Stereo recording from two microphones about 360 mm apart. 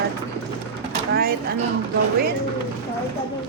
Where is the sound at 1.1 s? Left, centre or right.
Right.